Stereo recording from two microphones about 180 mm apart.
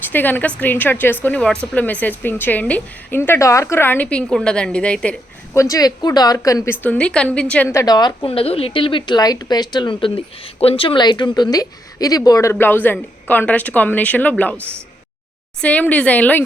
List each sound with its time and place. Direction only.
0.1 s a woman's voice: 10° left (ahead or behind)
5.5 s a woman's voice: 20° left (ahead or behind)
15.6 s a woman's voice: 10° left (ahead or behind)